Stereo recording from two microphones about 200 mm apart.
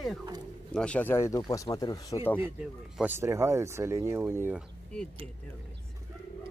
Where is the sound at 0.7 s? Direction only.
5° left (ahead or behind).